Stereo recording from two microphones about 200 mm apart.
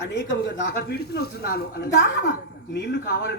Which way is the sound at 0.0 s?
60° left (ahead or behind).